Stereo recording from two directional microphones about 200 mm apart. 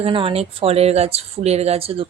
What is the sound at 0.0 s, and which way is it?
Speech, 25° right (ahead or behind).